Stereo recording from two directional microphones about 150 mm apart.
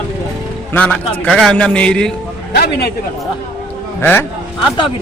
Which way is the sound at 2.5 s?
90° left.